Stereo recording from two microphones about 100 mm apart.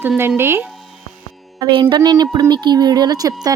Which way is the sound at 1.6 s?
50° right (ahead or behind).